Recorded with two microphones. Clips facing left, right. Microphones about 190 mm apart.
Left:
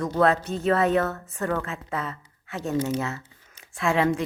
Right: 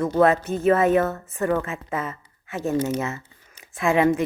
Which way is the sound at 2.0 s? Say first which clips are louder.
Right 2 dB; 20° right (ahead or behind).